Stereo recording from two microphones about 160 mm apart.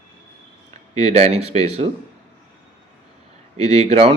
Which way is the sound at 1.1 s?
40° right (ahead or behind).